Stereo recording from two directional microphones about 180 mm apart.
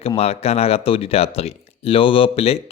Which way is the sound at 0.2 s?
35° left (ahead or behind).